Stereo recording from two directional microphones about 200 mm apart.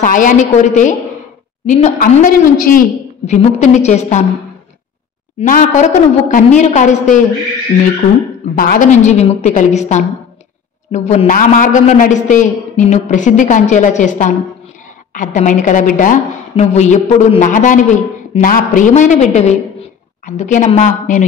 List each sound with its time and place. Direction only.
0.0 s a man's voice: 40° left (ahead or behind)
5.4 s a man's voice: 40° left (ahead or behind)
8.5 s a man's voice: 45° left (ahead or behind)